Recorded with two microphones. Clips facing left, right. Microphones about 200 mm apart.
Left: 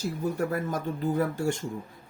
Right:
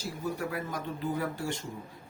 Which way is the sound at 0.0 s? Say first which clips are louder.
Left 5 dB; 45° left (ahead or behind).